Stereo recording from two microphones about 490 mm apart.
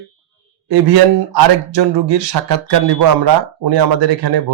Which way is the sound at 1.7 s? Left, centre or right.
Right.